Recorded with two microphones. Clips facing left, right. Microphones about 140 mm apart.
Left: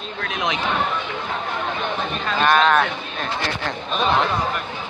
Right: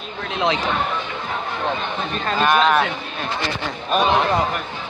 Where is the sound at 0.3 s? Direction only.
30° right (ahead or behind).